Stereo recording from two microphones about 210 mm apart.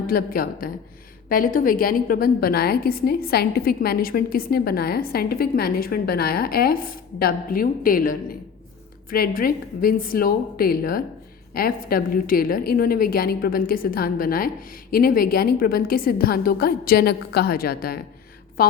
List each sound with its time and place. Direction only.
0.1 s a woman's voice: 45° left (ahead or behind)